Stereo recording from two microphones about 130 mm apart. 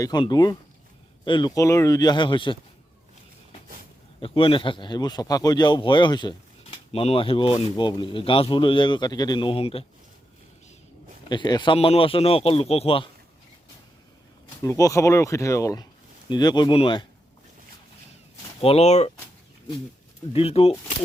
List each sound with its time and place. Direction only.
0.0 s speech: 30° left (ahead or behind)
1.5 s speech: 25° left (ahead or behind); by 2.6 s 40° left (ahead or behind)
4.2 s speech: 40° left (ahead or behind)
6.9 s speech: 45° left (ahead or behind)
11.3 s a man's voice: 35° left (ahead or behind)
14.6 s speech: 25° left (ahead or behind); by 17.1 s 40° left (ahead or behind)
18.6 s speech: 55° left (ahead or behind)
20.3 s a man's voice: 50° left (ahead or behind)